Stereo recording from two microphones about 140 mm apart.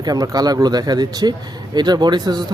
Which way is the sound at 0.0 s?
25° right (ahead or behind).